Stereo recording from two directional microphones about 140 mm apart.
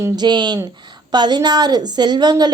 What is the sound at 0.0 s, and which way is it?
A woman's voice, 30° right (ahead or behind).